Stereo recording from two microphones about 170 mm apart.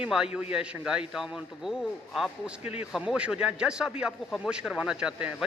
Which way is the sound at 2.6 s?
40° left (ahead or behind).